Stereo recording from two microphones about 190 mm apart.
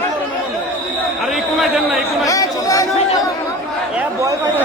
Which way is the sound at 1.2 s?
Centre (ahead or behind).